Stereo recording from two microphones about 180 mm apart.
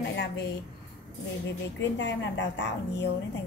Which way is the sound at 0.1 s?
70° left (ahead or behind).